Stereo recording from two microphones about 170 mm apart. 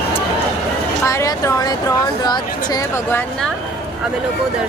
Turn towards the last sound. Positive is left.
turn(degrees=10)  # may be behind; listen again after turning